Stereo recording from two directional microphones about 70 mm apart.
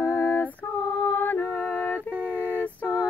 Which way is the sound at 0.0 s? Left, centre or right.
Left.